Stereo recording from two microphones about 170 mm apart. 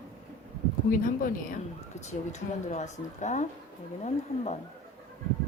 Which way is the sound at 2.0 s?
45° left (ahead or behind).